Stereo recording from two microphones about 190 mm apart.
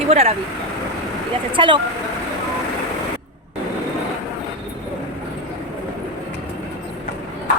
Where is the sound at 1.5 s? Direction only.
25° right (ahead or behind).